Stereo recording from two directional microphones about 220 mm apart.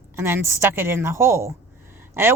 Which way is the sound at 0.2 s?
10° right (ahead or behind).